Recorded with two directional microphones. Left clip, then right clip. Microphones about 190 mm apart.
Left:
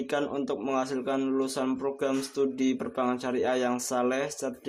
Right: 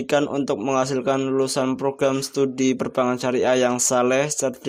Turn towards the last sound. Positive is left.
turn(degrees=-45)  # may be behind; listen again after turning